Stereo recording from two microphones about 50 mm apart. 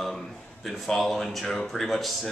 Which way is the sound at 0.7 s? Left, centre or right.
Centre.